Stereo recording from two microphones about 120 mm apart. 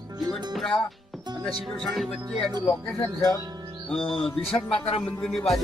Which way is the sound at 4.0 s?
50° left (ahead or behind).